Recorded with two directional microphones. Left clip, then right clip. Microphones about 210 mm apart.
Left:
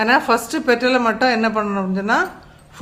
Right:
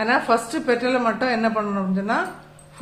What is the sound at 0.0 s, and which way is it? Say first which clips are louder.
A woman's voice: left 4 dB; 40° left (ahead or behind).